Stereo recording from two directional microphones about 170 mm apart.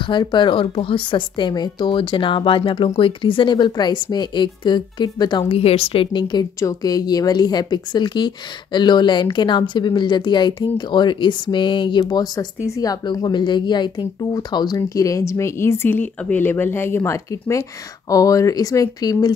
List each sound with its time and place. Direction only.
0.0 s a woman's voice: 25° left (ahead or behind)